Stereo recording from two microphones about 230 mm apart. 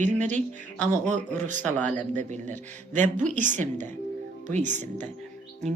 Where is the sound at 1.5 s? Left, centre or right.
Centre.